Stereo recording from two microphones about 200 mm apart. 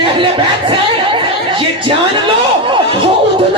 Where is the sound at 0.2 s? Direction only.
25° right (ahead or behind).